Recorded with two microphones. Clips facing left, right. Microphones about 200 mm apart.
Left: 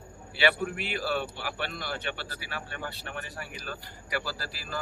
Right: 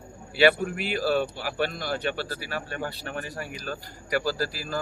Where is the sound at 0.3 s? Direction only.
40° right (ahead or behind).